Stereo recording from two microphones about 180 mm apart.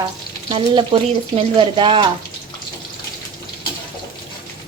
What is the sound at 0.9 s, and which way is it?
Speech, 30° right (ahead or behind).